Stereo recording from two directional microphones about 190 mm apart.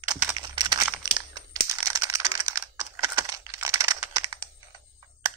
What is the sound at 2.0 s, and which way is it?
Computer keyboard, 15° right (ahead or behind).